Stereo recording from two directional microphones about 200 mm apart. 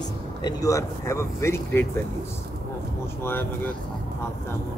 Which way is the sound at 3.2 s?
10° left (ahead or behind).